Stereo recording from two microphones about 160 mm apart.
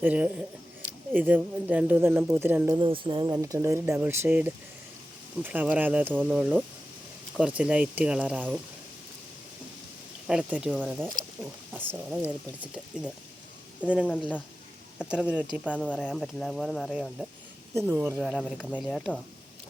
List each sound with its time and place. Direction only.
0.0 s speech: 10° right (ahead or behind)
2.7 s speech: 30° right (ahead or behind)
3.3 s speech: 20° right (ahead or behind)
10.2 s speech: 5° right (ahead or behind)
16.0 s speech: 5° left (ahead or behind)
17.7 s speech: 15° right (ahead or behind)
18.2 s speech: 5° right (ahead or behind)